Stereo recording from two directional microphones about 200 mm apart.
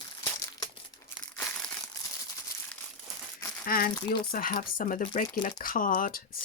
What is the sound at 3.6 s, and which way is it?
Speech, 45° left (ahead or behind).